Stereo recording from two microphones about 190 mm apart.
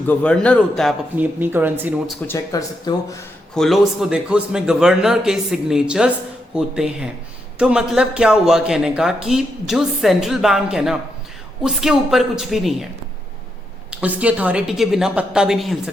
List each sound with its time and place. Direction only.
0.1 s speech: 5° left (ahead or behind)
1.1 s speech: 10° right (ahead or behind)
2.2 s speech: 15° left (ahead or behind)
3.5 s speech: centre (ahead or behind)
13.9 s speech: 5° right (ahead or behind)